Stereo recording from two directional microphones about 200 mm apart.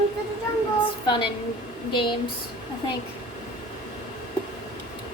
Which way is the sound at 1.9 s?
25° left (ahead or behind).